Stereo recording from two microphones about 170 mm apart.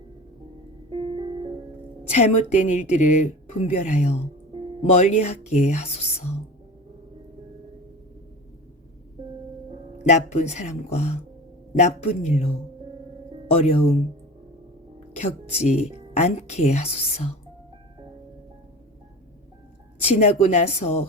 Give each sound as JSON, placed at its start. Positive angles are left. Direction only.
{"t": 1.1, "sound": "music", "side_deg": -30}
{"t": 2.0, "sound": "speech", "side_deg": 40}
{"t": 10.0, "sound": "speech", "side_deg": 45}
{"t": 13.5, "sound": "speech", "side_deg": 35}
{"t": 15.1, "sound": "speech", "side_deg": 40}
{"t": 20.1, "sound": "speech", "side_deg": 40}